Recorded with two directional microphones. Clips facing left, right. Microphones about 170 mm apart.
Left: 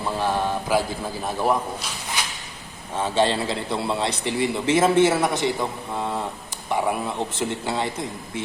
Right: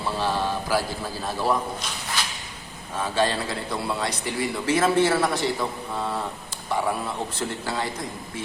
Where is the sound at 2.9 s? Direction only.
25° left (ahead or behind).